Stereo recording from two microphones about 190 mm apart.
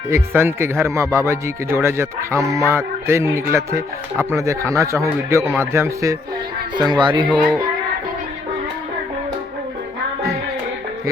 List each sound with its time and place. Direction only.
0.1 s speech: 10° right (ahead or behind)